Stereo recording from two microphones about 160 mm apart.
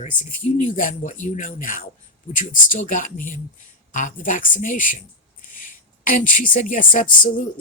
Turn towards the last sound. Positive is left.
turn(degrees=55)  # may be behind; listen again after turning